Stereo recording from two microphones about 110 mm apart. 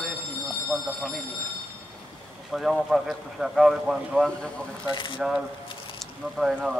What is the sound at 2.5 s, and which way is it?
Speech, 5° right (ahead or behind).